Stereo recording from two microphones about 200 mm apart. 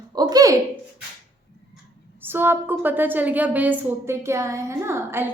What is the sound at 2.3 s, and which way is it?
A woman's voice, 10° right (ahead or behind).